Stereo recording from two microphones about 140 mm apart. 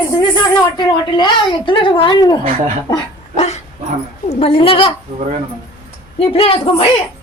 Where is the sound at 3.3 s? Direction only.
50° left (ahead or behind).